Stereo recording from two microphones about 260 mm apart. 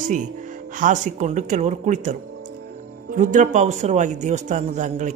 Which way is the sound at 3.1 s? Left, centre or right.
Right.